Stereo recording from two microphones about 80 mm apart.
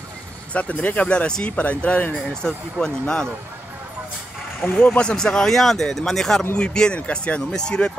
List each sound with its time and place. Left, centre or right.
0.5 s speech: centre
4.6 s speech: centre